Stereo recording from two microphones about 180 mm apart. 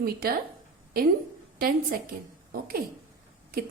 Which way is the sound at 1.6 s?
55° right (ahead or behind).